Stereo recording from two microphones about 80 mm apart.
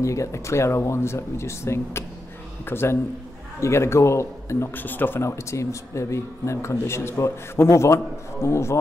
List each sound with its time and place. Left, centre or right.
0.0 s a man's voice: left